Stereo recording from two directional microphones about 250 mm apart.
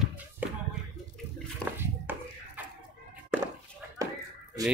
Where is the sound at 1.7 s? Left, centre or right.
Centre.